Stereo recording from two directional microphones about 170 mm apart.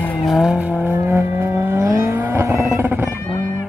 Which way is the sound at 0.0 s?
5° left (ahead or behind).